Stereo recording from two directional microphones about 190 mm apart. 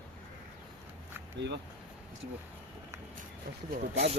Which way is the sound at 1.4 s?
65° right (ahead or behind).